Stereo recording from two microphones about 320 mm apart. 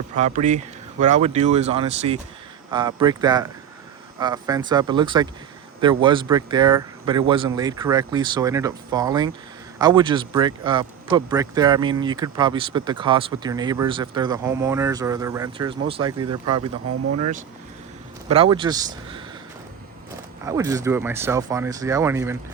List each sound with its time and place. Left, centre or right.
0.2 s speech: right
18.3 s speech: centre
20.4 s speech: centre